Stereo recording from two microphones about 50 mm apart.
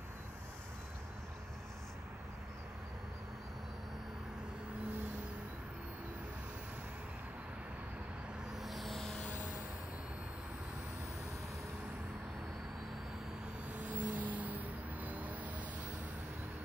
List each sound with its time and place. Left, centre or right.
8.5 s vehicle: centre
13.7 s vehicle: right